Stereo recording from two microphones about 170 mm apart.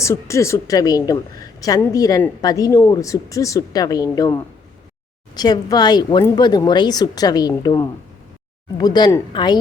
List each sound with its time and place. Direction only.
0.0 s a woman's voice: 15° left (ahead or behind)